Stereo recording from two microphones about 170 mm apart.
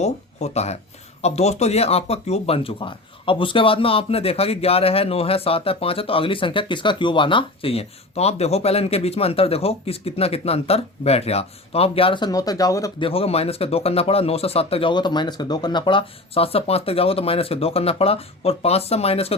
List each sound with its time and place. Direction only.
0.0 s speech: 40° left (ahead or behind); by 13.1 s 20° left (ahead or behind)
13.1 s speech: 35° left (ahead or behind)